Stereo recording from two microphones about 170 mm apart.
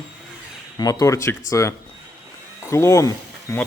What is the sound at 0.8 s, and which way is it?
Speech, 20° left (ahead or behind).